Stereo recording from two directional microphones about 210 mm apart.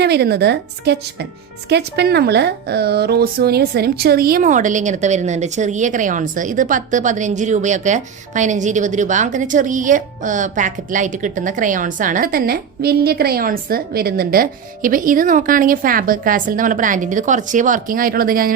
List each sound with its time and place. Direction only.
0.0 s a woman's voice: 50° right (ahead or behind)